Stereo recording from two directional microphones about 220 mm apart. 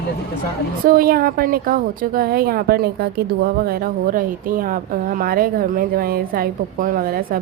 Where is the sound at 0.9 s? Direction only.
40° right (ahead or behind).